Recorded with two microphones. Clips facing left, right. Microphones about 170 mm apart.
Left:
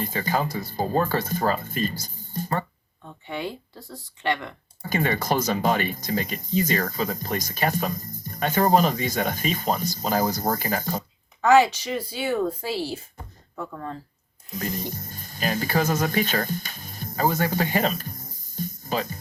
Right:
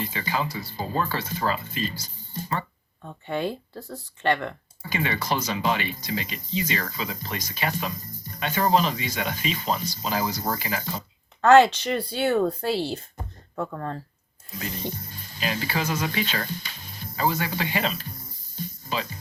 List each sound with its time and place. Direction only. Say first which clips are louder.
0.0 s speech: left 3 dB; 45° left (ahead or behind)
3.2 s speech: right 4 dB; 15° left (ahead or behind)
4.8 s speech: left 4 dB; 45° left (ahead or behind)
11.4 s speech: right 2 dB; 65° right (ahead or behind)
12.6 s speech: right 2 dB; 5° left (ahead or behind)
14.9 s speech: left 2 dB; 45° left (ahead or behind)